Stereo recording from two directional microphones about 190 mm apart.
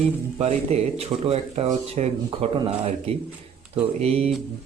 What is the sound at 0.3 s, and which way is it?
Speech, 35° right (ahead or behind).